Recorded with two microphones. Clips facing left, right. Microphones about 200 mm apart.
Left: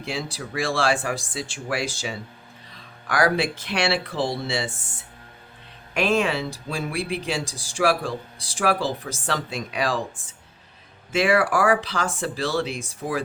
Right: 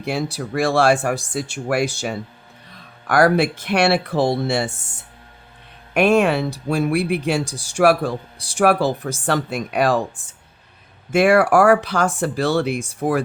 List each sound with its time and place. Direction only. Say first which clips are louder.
0.0 s speech: right 7 dB; 60° right (ahead or behind)
5.9 s speech: right 6 dB; 60° right (ahead or behind)
11.1 s speech: right 6 dB; 60° right (ahead or behind)